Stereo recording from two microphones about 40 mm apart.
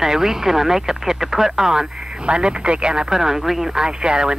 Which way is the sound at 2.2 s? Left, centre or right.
Right.